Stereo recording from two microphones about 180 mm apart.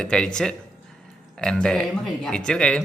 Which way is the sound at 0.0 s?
5° left (ahead or behind).